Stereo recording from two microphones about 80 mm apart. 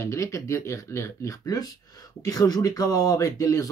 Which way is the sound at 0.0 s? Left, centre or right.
Left.